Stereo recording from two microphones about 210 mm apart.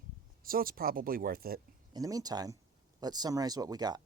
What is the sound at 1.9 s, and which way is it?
Speech, 15° right (ahead or behind).